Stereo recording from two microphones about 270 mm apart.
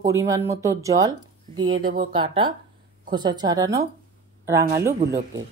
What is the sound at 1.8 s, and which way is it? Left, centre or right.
Speech, right.